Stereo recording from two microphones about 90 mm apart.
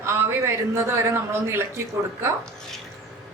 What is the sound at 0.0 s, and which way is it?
A man's voice, 30° right (ahead or behind).